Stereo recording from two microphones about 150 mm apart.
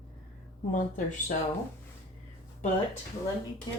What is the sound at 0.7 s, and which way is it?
Speech, 60° left (ahead or behind).